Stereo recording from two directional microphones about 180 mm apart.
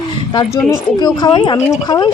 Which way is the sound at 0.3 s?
25° left (ahead or behind).